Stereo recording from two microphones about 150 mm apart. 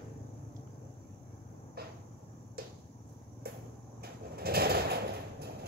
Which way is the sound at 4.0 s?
90° right.